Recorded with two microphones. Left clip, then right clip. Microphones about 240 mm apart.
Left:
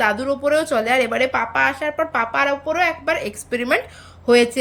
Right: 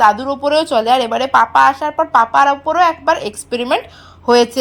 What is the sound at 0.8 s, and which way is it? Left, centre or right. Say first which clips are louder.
Speech: right 5 dB; centre.